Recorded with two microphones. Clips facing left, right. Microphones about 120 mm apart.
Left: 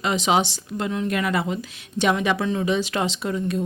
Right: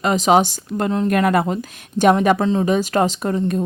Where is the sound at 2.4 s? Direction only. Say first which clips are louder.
Right 6 dB; 30° right (ahead or behind).